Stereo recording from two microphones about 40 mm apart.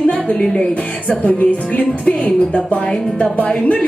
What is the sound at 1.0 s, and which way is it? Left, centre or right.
A woman's voice, left.